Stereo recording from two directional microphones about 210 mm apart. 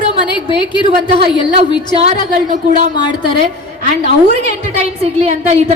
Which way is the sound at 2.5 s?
35° right (ahead or behind).